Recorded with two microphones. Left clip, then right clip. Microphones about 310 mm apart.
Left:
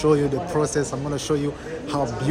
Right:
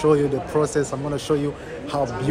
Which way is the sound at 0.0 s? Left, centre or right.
Centre.